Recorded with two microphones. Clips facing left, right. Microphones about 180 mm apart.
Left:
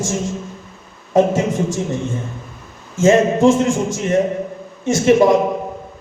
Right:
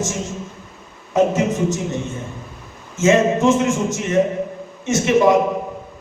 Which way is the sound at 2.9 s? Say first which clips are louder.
Left 2 dB; 30° left (ahead or behind).